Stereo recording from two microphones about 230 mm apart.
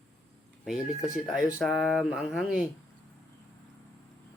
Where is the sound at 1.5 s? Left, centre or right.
Centre.